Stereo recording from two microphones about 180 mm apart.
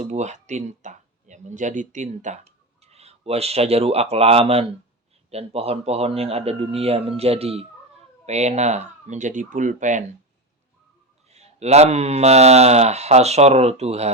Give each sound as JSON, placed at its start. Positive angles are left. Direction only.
{"t": 0.0, "sound": "speech", "side_deg": -40}
{"t": 11.3, "sound": "speech", "side_deg": -35}